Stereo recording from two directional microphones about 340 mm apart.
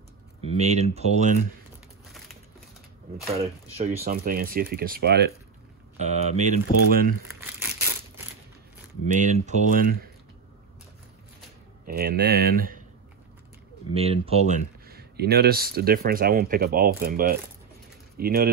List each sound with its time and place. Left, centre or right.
0.4 s speech: centre
3.3 s speech: centre
7.3 s crumpling: centre
9.0 s speech: right
11.8 s speech: right
13.9 s speech: centre